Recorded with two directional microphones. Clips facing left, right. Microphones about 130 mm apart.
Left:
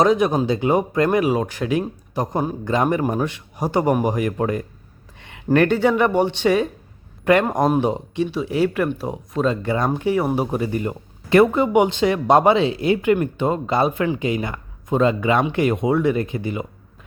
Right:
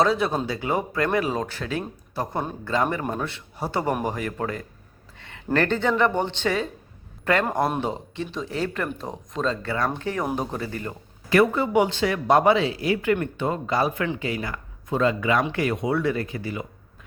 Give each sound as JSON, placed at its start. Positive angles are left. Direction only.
{"t": 0.0, "sound": "speech", "side_deg": 15}
{"t": 5.1, "sound": "a sound", "side_deg": 15}
{"t": 5.5, "sound": "speech", "side_deg": 15}